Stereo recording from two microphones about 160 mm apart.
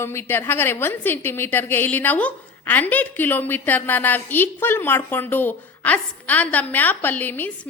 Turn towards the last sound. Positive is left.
turn(degrees=10)  # may be behind; listen again after turning